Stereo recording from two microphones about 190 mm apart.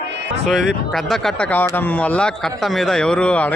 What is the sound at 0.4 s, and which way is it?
Speech, centre (ahead or behind).